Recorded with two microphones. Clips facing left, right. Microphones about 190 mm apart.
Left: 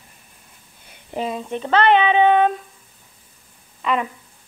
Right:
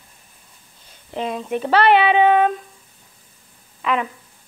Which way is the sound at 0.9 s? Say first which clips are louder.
Even; 5° left (ahead or behind).